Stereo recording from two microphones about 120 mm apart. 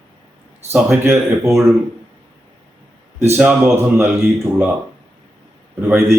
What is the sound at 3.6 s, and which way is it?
Speech, 25° right (ahead or behind).